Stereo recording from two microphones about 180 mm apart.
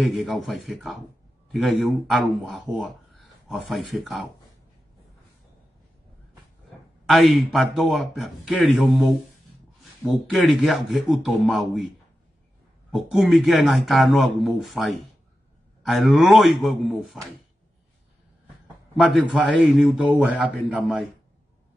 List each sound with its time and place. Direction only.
0.0 s a man's voice: centre (ahead or behind)
7.1 s a man's voice: centre (ahead or behind)
12.9 s a man's voice: centre (ahead or behind)
18.9 s a man's voice: centre (ahead or behind)